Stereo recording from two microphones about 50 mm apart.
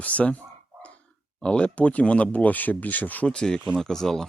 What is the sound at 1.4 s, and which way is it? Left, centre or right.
Speech, left.